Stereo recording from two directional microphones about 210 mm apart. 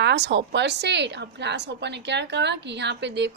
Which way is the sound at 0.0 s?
55° right (ahead or behind).